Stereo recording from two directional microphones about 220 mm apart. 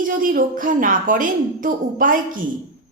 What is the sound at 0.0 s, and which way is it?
A woman's voice, 40° right (ahead or behind).